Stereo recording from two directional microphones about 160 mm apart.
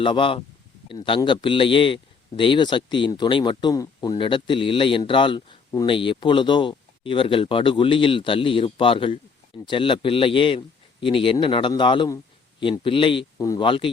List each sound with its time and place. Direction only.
0.0 s a man's voice: 30° left (ahead or behind)